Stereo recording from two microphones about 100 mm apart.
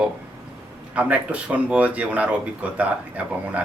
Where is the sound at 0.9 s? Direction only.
15° right (ahead or behind).